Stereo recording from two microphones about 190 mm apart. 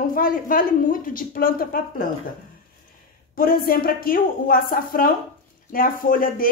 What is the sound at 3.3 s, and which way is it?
Speech, 50° left (ahead or behind).